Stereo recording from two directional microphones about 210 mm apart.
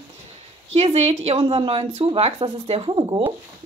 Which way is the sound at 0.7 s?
30° right (ahead or behind).